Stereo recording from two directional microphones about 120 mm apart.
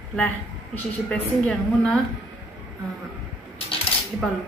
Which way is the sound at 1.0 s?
10° left (ahead or behind).